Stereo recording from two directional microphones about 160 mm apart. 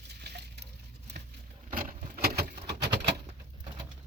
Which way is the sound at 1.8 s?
65° right (ahead or behind).